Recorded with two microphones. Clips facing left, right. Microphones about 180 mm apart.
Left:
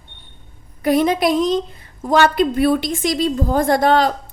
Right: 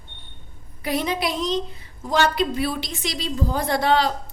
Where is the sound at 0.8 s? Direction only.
50° left (ahead or behind).